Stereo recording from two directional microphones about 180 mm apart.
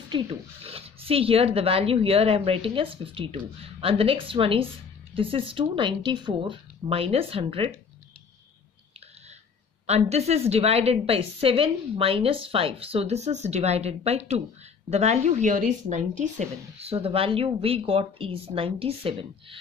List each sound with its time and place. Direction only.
0.1 s speech: 30° right (ahead or behind)
9.8 s speech: 35° right (ahead or behind)